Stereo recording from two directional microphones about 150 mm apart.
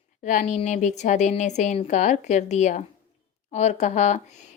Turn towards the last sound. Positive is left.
turn(degrees=50)  # may be behind; listen again after turning